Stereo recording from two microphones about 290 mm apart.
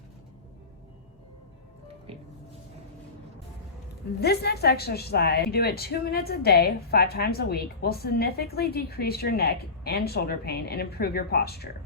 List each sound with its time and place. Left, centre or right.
4.2 s a woman's voice: left